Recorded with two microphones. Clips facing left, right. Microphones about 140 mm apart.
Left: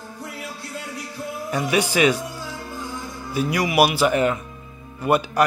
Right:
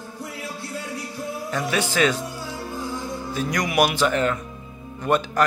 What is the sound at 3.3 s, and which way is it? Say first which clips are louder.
A man's voice: left 3 dB; 10° left (ahead or behind).